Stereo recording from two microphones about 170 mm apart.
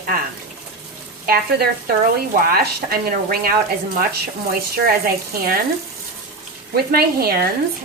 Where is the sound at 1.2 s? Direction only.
60° right (ahead or behind).